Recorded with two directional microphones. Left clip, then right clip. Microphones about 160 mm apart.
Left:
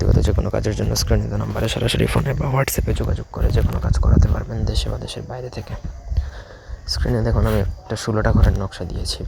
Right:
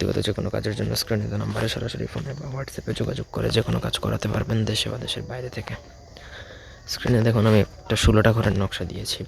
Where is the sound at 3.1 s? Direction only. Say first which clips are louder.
Even; 20° right (ahead or behind).